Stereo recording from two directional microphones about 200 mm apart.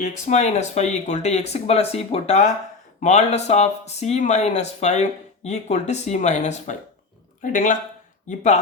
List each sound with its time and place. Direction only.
0.0 s speech: 35° left (ahead or behind)